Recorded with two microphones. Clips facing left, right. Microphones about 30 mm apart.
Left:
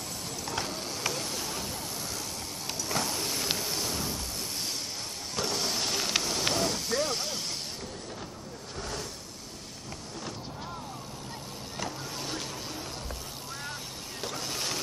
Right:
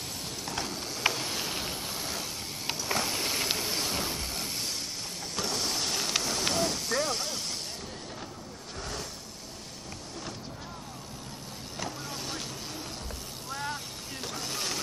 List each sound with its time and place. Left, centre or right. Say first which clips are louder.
0.5 s mechanisms: left 1 dB; centre
1.0 s a sound: right 5 dB; right
5.3 s vehicle: left 1 dB; centre
8.7 s vehicle: left 1 dB; centre
11.7 s vehicle: even; centre
14.2 s printer: left 1 dB; centre